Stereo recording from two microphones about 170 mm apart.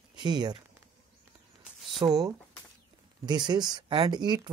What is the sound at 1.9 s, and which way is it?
Speech, 25° right (ahead or behind).